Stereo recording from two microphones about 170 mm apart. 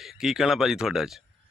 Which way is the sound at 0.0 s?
Centre (ahead or behind).